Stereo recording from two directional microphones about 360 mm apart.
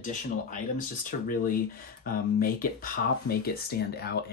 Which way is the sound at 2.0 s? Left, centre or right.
Left.